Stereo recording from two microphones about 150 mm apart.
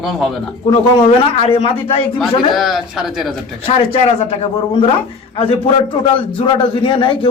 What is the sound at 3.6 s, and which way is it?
Speech, 40° left (ahead or behind).